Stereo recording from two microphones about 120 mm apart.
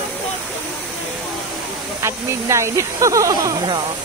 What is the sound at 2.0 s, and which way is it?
Speech, 25° right (ahead or behind).